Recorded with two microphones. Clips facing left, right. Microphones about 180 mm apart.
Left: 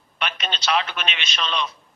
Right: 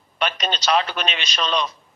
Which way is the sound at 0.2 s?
40° right (ahead or behind).